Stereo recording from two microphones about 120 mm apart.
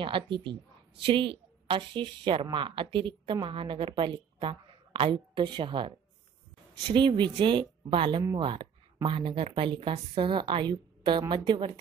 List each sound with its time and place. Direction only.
0.0 s a woman's voice: 45° right (ahead or behind)